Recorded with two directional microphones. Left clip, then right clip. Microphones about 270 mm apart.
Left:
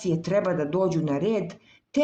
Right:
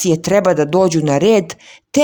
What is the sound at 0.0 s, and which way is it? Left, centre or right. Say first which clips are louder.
Speech: right 11 dB; right.